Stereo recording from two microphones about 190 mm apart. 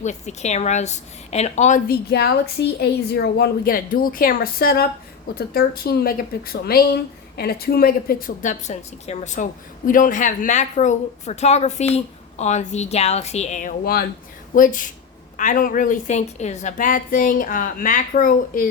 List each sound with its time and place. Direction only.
0.0 s speech: 35° left (ahead or behind)
2.0 s a woman's voice: 60° left (ahead or behind)